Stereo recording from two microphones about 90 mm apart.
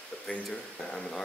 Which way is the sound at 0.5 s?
10° left (ahead or behind).